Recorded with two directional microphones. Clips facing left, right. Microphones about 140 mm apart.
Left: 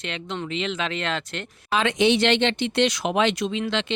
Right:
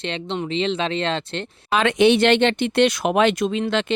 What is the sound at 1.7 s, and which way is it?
Speech, 60° right (ahead or behind).